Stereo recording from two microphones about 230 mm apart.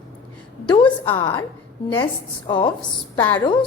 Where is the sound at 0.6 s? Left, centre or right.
Left.